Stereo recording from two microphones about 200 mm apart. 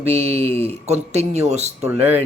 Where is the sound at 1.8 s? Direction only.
10° right (ahead or behind).